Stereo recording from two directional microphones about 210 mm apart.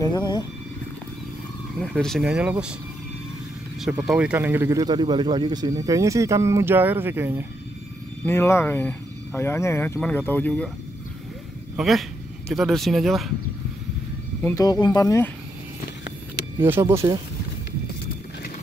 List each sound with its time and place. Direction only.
0.0 s speech: 20° left (ahead or behind)
1.8 s speech: centre (ahead or behind)
3.8 s speech: centre (ahead or behind)
8.3 s speech: 10° left (ahead or behind)
11.7 s speech: centre (ahead or behind)
14.4 s speech: 15° left (ahead or behind)
16.8 s speech: 20° right (ahead or behind)